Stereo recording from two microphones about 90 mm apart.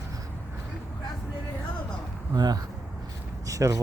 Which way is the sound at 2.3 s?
45° right (ahead or behind).